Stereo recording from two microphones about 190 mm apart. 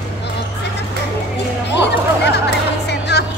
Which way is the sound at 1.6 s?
65° left (ahead or behind).